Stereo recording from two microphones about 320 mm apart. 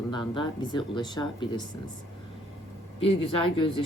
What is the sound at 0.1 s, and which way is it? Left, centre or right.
Speech, centre.